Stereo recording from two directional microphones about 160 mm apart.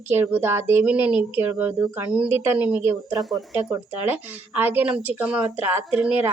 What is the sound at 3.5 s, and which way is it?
Speech, 15° right (ahead or behind).